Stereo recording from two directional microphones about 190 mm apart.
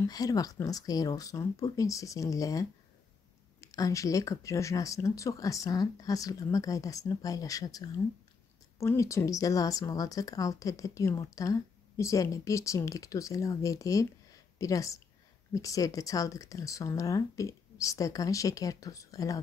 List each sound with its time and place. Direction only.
0.0 s speech: 20° left (ahead or behind)
3.6 s speech: 15° left (ahead or behind)